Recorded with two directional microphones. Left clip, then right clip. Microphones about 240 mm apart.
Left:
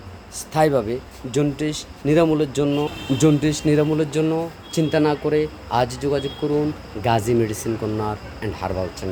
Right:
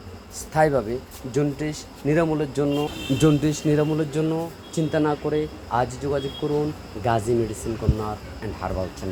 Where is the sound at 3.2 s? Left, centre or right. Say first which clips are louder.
Left 2 dB; centre; by 8.8 s left.